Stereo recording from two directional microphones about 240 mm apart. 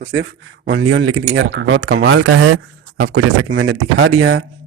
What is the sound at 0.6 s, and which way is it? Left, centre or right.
Speech, right.